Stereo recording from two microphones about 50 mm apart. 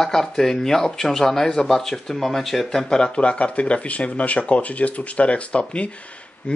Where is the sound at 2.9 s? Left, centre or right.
Centre.